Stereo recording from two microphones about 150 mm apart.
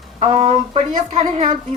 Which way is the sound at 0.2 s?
45° right (ahead or behind).